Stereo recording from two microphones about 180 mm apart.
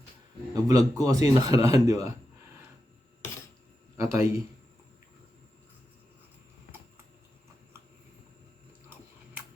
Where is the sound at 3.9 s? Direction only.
15° right (ahead or behind).